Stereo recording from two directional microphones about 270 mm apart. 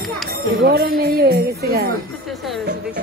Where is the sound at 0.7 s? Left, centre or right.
Right.